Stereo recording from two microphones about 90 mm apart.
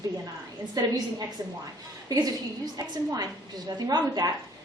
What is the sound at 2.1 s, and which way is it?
A woman's voice, 45° right (ahead or behind).